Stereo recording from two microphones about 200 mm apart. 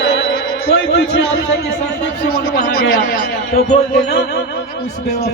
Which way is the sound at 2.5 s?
45° left (ahead or behind).